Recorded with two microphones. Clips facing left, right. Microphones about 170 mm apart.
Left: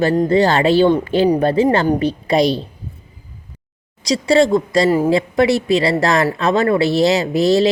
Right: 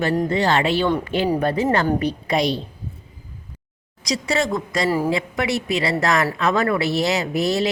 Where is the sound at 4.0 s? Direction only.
30° left (ahead or behind).